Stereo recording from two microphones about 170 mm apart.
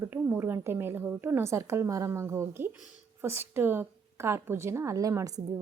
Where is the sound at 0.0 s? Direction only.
15° right (ahead or behind).